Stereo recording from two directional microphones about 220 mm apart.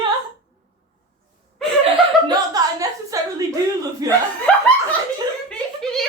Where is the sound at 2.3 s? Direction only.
15° right (ahead or behind).